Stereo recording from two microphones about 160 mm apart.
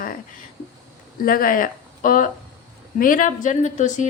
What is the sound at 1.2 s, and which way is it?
Speech, 60° left (ahead or behind).